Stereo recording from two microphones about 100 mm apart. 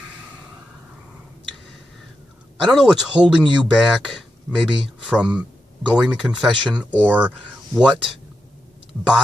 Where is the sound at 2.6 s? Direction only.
5° right (ahead or behind).